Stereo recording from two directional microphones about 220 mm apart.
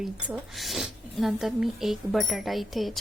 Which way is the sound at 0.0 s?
Centre (ahead or behind).